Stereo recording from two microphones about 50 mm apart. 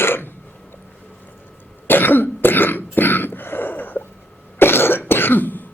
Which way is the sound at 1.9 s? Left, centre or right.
Left.